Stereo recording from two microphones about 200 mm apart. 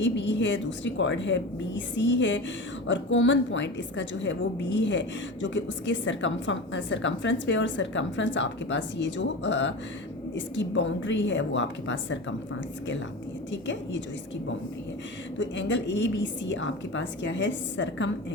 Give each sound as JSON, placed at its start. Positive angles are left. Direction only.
{"t": 0.2, "sound": "a woman's voice", "side_deg": 65}
{"t": 15.4, "sound": "a woman's voice", "side_deg": 65}